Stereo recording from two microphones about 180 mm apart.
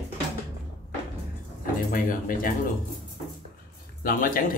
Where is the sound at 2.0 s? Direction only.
50° left (ahead or behind).